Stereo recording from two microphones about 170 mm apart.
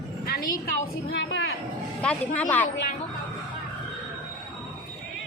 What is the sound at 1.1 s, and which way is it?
Speech, 80° left.